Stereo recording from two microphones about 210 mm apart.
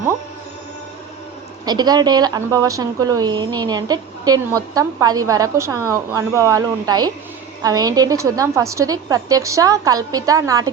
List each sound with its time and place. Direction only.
1.6 s a woman's voice: 20° right (ahead or behind)